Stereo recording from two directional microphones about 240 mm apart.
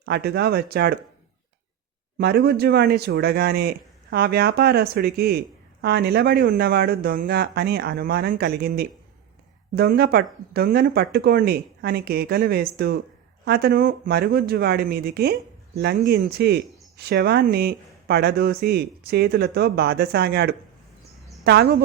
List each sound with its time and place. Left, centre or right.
0.0 s speech: right
2.1 s speech: right